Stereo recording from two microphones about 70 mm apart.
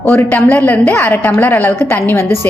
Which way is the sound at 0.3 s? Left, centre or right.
Left.